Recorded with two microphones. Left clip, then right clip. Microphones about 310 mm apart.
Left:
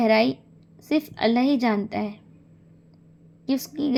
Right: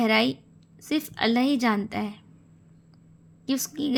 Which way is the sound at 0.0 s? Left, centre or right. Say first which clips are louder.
Left 3 dB; centre.